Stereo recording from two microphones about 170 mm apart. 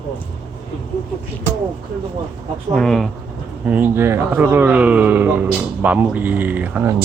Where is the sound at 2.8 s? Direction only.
Centre (ahead or behind).